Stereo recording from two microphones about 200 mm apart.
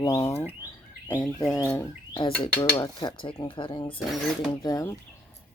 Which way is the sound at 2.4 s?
20° left (ahead or behind).